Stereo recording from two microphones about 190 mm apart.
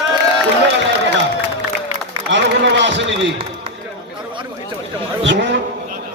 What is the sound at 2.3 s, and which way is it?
A man's voice, 70° right (ahead or behind).